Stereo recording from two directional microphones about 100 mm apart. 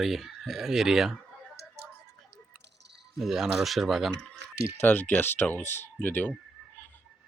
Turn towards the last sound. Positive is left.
turn(degrees=20)  # may be behind; listen again after turning